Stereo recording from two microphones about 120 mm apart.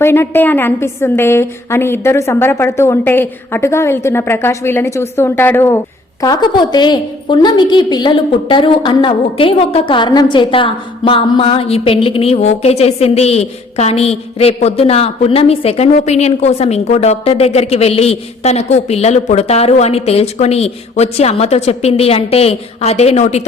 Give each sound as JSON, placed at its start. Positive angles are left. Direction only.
{"t": 0.0, "sound": "a woman's voice", "side_deg": 20}
{"t": 6.2, "sound": "a woman's voice", "side_deg": 35}